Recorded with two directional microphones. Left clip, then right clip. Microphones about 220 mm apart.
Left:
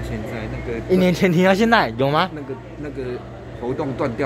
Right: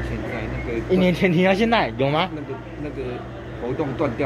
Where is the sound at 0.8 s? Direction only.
30° left (ahead or behind).